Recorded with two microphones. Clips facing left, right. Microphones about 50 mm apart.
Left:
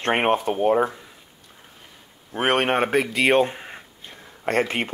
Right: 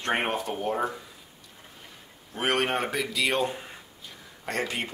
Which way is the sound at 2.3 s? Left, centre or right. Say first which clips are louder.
Left 6 dB; left.